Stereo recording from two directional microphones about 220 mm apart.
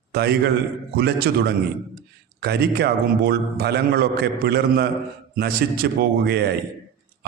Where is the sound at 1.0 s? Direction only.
50° right (ahead or behind).